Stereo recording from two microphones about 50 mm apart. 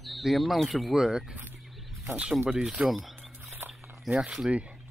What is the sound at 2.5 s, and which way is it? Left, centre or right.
Speech, centre.